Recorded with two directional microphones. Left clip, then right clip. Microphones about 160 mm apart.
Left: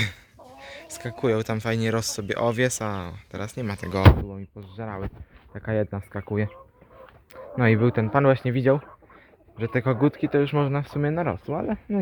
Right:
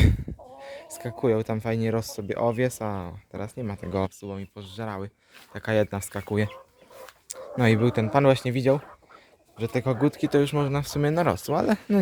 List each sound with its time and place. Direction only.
0.6 s speech: 20° right (ahead or behind); by 3.8 s centre (ahead or behind)
4.3 s speech: 25° right (ahead or behind); by 10.2 s 10° right (ahead or behind)
10.2 s speech: 25° right (ahead or behind)